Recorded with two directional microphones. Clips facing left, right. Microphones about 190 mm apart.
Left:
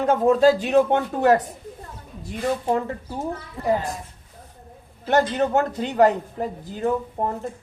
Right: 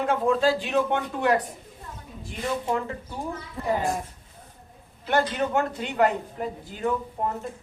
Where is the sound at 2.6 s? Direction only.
35° left (ahead or behind).